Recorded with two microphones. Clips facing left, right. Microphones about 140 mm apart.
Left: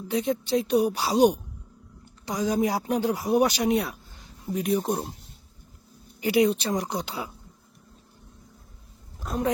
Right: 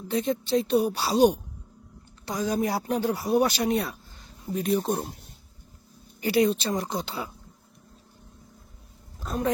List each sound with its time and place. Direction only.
0.1 s speech: 15° left (ahead or behind)
6.1 s speech: 15° left (ahead or behind)
9.2 s speech: 15° left (ahead or behind)